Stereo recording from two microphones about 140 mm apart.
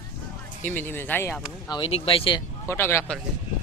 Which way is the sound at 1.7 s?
45° left (ahead or behind).